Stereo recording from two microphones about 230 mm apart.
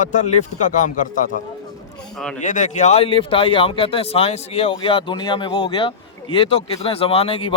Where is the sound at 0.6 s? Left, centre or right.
Left.